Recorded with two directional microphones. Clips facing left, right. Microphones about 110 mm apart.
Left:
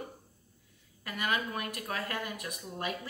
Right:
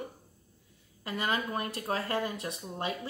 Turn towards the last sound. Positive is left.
turn(degrees=-30)  # may be behind; listen again after turning